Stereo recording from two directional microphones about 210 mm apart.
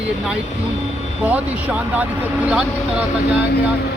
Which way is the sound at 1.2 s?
5° right (ahead or behind).